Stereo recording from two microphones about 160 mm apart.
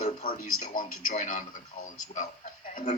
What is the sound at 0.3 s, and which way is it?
Speech, 60° left (ahead or behind).